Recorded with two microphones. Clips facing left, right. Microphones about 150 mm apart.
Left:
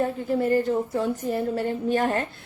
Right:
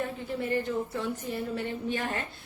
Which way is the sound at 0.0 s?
40° left (ahead or behind).